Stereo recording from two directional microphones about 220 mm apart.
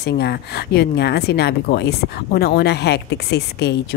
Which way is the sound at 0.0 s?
45° left (ahead or behind).